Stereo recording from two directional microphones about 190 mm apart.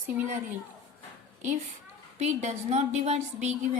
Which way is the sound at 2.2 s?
35° right (ahead or behind).